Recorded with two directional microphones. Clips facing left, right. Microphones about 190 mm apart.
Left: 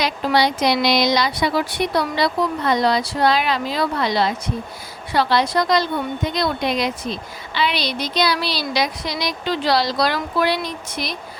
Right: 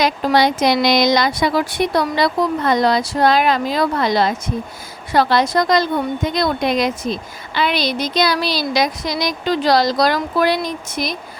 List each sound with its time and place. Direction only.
0.0 s a woman's voice: 50° right (ahead or behind)